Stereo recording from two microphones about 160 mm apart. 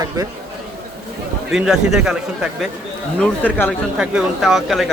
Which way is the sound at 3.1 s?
10° left (ahead or behind).